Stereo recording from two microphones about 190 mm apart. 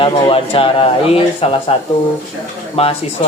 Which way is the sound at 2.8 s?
30° left (ahead or behind).